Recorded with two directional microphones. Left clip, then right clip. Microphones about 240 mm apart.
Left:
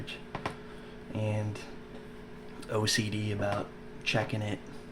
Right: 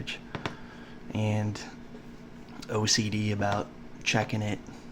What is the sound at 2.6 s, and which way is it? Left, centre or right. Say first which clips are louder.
Speech: right 2 dB; centre.